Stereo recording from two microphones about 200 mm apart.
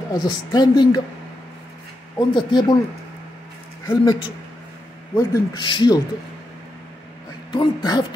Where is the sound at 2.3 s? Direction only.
20° left (ahead or behind).